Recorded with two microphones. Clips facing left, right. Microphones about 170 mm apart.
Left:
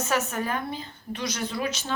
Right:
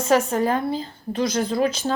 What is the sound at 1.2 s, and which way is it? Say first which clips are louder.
Speech: right 9 dB; 50° right (ahead or behind).